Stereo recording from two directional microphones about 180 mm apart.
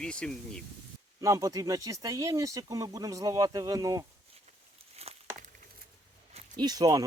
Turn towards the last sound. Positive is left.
turn(degrees=-20)  # may be behind; listen again after turning